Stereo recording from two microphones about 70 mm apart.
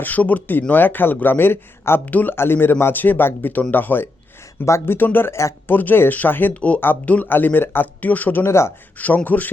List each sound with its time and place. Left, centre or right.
0.0 s speech: left
4.6 s speech: left
4.9 s speech: left
5.7 s speech: left